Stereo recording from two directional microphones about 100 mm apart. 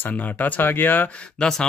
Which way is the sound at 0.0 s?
15° left (ahead or behind).